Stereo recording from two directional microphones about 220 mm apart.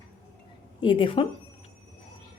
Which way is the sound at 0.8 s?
20° left (ahead or behind).